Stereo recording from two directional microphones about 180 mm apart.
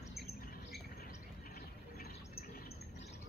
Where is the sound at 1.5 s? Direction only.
60° left (ahead or behind).